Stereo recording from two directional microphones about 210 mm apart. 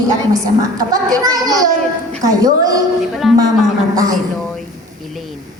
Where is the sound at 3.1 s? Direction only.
Centre (ahead or behind).